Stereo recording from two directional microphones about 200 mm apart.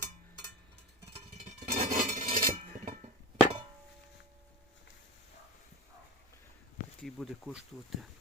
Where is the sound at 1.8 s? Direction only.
40° right (ahead or behind).